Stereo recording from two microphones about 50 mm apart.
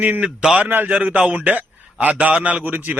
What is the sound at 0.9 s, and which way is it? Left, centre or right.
A man's voice, right.